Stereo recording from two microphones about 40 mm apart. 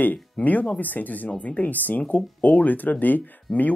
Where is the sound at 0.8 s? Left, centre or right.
Left.